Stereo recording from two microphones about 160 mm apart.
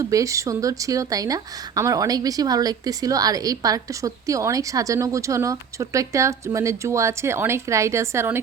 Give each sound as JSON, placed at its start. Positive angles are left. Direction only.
{"t": 0.0, "sound": "speech", "side_deg": -20}